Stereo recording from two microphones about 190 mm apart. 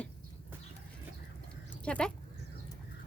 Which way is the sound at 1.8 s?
5° left (ahead or behind).